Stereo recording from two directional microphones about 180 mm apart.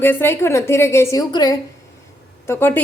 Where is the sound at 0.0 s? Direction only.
10° left (ahead or behind).